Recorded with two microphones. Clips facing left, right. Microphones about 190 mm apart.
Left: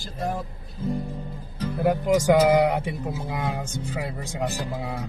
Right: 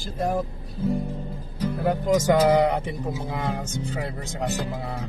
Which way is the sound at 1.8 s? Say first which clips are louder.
Left 1 dB; 10° left (ahead or behind).